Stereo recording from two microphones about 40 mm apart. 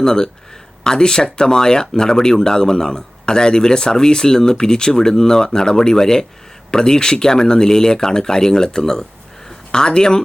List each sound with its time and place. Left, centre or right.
0.0 s speech: centre